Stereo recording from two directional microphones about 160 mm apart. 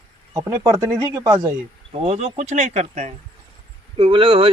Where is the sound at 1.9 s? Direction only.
40° right (ahead or behind).